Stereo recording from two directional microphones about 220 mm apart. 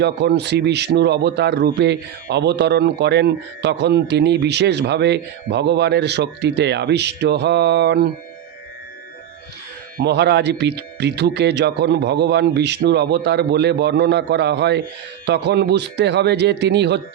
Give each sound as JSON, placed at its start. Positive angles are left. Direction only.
{"t": 0.0, "sound": "speech", "side_deg": -50}
{"t": 10.0, "sound": "speech", "side_deg": -50}